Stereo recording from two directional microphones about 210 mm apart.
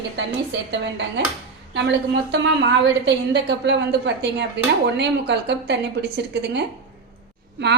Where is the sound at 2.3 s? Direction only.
55° right (ahead or behind).